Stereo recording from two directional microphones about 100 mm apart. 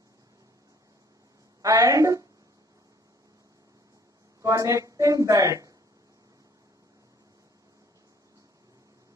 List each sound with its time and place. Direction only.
1.6 s a woman's voice: 35° right (ahead or behind)
4.4 s speech: 30° right (ahead or behind)